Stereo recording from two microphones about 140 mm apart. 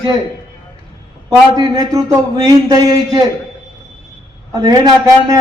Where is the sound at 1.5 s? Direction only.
30° right (ahead or behind).